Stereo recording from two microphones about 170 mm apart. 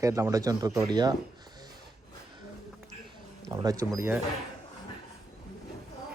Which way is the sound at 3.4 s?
20° right (ahead or behind).